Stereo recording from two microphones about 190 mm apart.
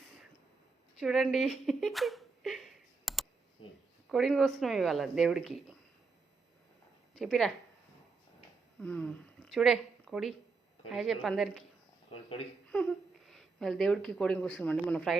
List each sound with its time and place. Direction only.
0.9 s speech: centre (ahead or behind)
7.2 s speech: centre (ahead or behind)
8.8 s a woman's voice: 5° left (ahead or behind)
12.7 s speech: 5° left (ahead or behind)